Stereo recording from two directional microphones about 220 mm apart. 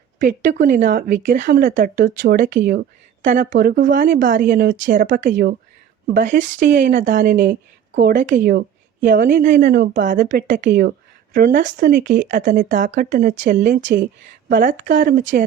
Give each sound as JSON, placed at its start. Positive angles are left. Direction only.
{"t": 0.4, "sound": "speech", "side_deg": -45}
{"t": 5.3, "sound": "a woman's voice", "side_deg": -50}
{"t": 6.1, "sound": "a woman's voice", "side_deg": -35}